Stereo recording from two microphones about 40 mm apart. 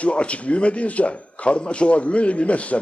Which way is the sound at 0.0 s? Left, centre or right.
Left.